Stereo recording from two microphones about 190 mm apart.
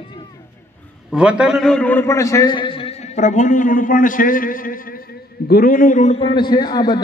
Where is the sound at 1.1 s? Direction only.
5° right (ahead or behind).